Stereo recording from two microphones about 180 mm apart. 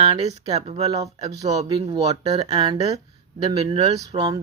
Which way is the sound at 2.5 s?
25° right (ahead or behind).